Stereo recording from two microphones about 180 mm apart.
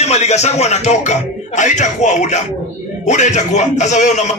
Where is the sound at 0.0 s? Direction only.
40° left (ahead or behind).